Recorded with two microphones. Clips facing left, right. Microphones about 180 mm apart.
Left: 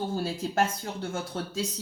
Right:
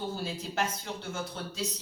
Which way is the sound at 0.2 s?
50° left (ahead or behind).